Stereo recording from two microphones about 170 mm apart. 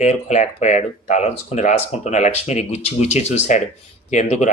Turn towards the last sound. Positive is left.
turn(degrees=45)  # may be behind; listen again after turning